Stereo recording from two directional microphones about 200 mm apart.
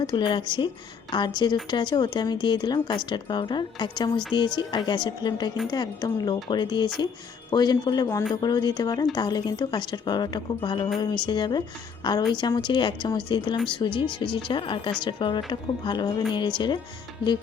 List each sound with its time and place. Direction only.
0.0 s speech: 25° left (ahead or behind)